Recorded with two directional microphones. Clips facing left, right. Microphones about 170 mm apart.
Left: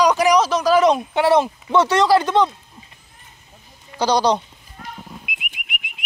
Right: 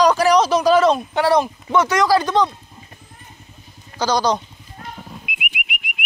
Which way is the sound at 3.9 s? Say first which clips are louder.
Left 1 dB; 30° left (ahead or behind).